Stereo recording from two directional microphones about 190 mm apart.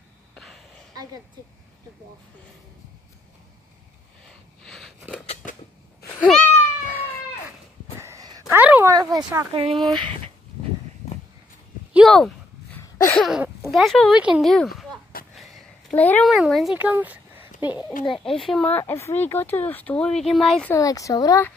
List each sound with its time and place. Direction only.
4.6 s a sound: centre (ahead or behind)
5.3 s scissors: 45° left (ahead or behind)
6.2 s cat: 5° left (ahead or behind)
8.0 s a sound: 15° right (ahead or behind)
8.9 s speech: 20° right (ahead or behind)
9.7 s speech: centre (ahead or behind)
11.9 s speech: centre (ahead or behind)
12.9 s a sound: 15° left (ahead or behind)
13.2 s speech: 5° right (ahead or behind)
18.1 s speech: centre (ahead or behind)
20.7 s speech: 15° left (ahead or behind)